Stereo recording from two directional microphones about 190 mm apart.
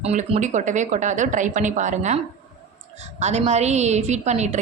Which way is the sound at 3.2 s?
35° right (ahead or behind).